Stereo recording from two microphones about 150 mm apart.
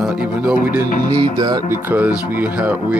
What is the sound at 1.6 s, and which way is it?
Speech, 10° right (ahead or behind).